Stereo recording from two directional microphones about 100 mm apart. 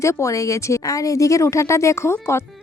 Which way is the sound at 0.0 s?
30° left (ahead or behind).